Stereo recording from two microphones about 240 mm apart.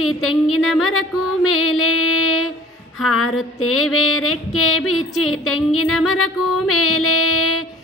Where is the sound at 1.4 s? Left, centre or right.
Left.